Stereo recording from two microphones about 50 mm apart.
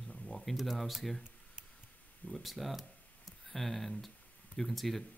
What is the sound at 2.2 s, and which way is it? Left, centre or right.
Speech, centre.